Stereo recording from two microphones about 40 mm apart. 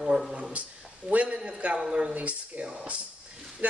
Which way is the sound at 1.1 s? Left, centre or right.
Right.